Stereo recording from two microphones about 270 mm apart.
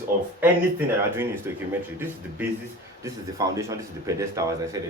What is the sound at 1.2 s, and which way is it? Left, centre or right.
Speech, centre.